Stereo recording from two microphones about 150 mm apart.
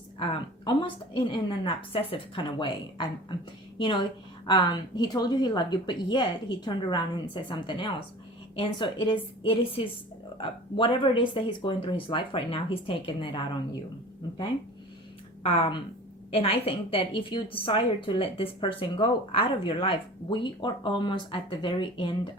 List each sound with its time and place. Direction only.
0.2 s a woman's voice: 30° left (ahead or behind)
15.4 s a woman's voice: 35° left (ahead or behind)